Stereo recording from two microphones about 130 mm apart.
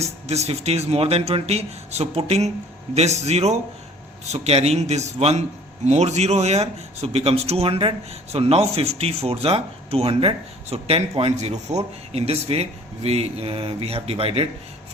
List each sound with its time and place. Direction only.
0.3 s a man's voice: 55° right (ahead or behind)